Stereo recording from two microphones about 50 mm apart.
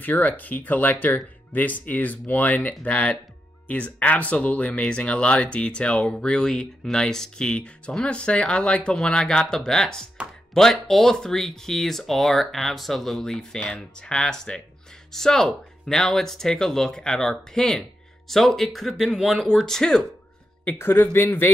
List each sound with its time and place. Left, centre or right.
0.0 s speech: left; by 20.1 s centre
20.8 s speech: left